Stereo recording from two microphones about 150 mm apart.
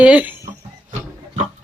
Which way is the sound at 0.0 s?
10° right (ahead or behind).